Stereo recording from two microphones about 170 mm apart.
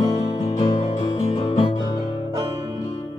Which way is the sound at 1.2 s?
40° left (ahead or behind).